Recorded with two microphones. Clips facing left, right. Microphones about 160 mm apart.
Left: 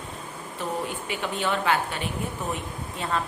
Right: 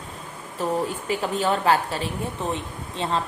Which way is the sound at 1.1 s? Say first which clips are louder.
Right 4 dB; 35° right (ahead or behind).